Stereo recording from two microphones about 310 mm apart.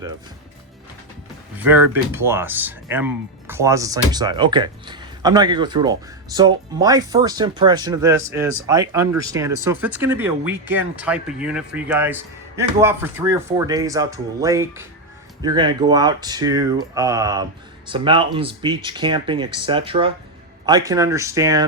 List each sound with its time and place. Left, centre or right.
1.5 s speech: centre